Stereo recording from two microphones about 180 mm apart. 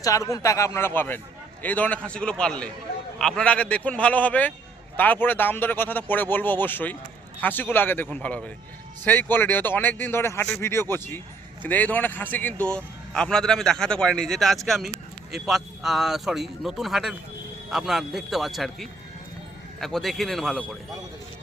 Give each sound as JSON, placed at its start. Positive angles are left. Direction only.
{"t": 0.0, "sound": "a man's voice", "side_deg": 20}